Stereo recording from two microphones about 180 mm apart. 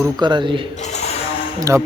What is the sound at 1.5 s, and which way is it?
Speech, 20° right (ahead or behind).